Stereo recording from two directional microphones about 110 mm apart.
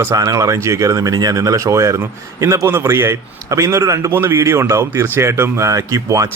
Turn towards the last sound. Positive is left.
turn(degrees=-30)  # may be behind; listen again after turning